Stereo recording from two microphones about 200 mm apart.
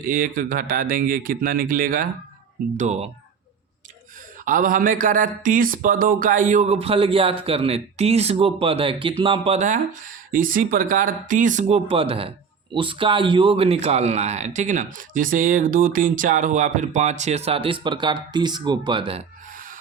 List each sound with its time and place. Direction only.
0.0 s speech: 45° right (ahead or behind)
2.7 s speech: 35° right (ahead or behind)
4.4 s speech: 45° right (ahead or behind); by 19.2 s 25° right (ahead or behind)